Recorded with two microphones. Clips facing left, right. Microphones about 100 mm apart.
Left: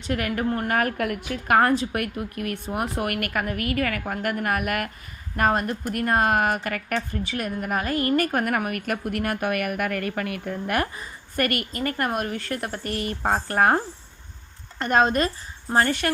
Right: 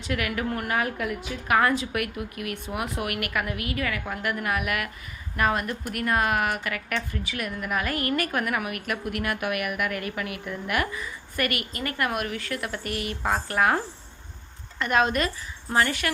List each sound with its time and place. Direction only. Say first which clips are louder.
0.1 s a woman's voice: left 3 dB; 40° left (ahead or behind)
0.7 s a woman's voice: left 3 dB; 50° left (ahead or behind); by 16.1 s 35° left (ahead or behind)